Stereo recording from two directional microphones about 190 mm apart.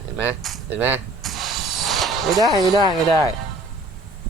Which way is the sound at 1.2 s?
Centre (ahead or behind).